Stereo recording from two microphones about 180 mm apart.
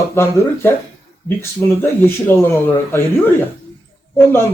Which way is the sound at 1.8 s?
15° left (ahead or behind).